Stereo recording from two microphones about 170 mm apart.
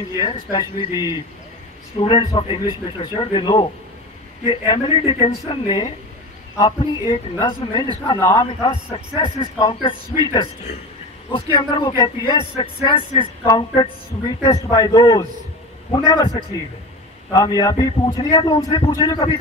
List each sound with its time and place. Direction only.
0.2 s speech: 25° left (ahead or behind)
4.6 s a woman's voice: 35° left (ahead or behind)
11.5 s speech: 25° left (ahead or behind)